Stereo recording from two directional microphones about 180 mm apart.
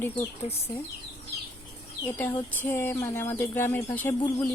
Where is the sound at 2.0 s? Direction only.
10° left (ahead or behind).